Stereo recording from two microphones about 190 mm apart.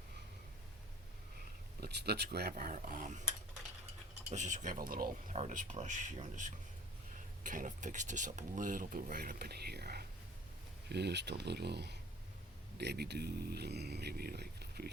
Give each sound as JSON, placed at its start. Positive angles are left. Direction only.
{"t": 1.8, "sound": "speech", "side_deg": -60}
{"t": 4.3, "sound": "speech", "side_deg": -40}